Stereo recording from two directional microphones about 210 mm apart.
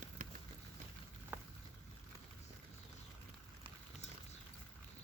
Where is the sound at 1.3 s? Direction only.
5° right (ahead or behind).